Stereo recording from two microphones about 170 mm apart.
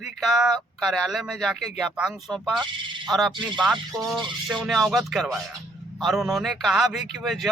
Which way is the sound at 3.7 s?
20° right (ahead or behind).